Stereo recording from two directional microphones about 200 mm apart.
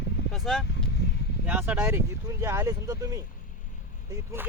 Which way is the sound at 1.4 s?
10° right (ahead or behind).